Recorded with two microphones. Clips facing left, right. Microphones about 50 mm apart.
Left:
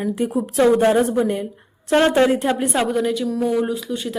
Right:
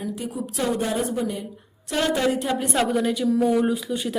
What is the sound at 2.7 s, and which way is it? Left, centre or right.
A woman's voice, centre.